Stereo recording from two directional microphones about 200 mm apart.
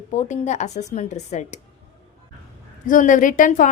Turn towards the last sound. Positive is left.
turn(degrees=40)  # may be behind; listen again after turning